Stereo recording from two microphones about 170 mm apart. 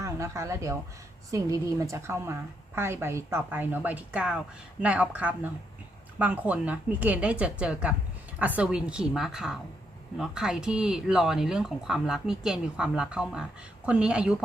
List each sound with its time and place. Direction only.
0.0 s a woman's voice: 15° right (ahead or behind)